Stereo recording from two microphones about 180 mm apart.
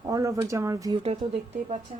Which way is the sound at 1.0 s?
35° right (ahead or behind).